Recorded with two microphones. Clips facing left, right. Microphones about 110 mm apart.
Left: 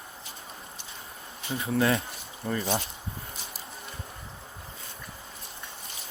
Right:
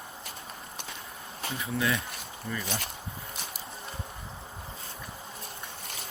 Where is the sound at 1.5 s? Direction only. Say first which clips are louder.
Left 5 dB; 35° left (ahead or behind).